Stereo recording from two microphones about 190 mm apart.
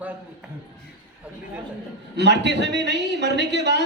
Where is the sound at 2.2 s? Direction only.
65° right (ahead or behind).